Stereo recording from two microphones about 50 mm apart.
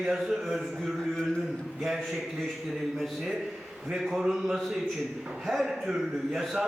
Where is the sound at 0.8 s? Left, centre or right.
Centre.